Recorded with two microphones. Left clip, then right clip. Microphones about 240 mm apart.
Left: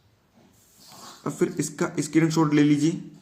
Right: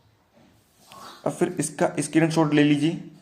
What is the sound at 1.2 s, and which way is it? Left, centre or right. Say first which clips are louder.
Speech: right 1 dB; centre.